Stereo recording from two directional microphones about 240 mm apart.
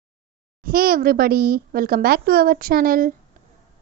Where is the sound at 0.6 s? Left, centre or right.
Right.